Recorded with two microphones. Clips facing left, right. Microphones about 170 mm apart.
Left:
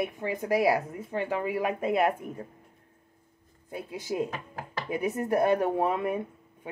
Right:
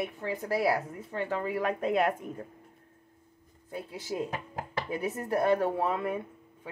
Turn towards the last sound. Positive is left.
turn(degrees=20)  # may be behind; listen again after turning